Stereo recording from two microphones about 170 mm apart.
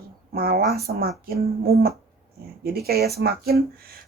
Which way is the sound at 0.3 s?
60° right (ahead or behind).